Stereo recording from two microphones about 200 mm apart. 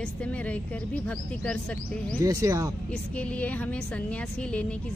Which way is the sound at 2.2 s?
15° right (ahead or behind).